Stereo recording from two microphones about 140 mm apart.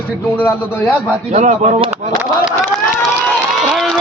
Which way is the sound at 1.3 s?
60° right (ahead or behind).